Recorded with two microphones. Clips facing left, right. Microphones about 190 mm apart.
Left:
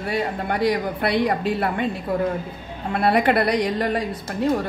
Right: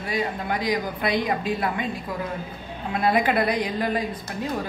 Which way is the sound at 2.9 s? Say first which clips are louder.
Left 3 dB; 65° left (ahead or behind).